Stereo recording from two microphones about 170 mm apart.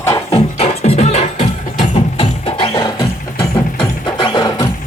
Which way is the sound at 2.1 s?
30° left (ahead or behind).